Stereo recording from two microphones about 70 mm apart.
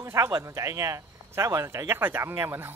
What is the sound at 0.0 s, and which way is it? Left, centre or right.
Speech, right.